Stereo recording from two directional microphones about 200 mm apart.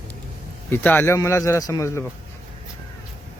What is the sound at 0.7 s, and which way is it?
A man's voice, 10° left (ahead or behind).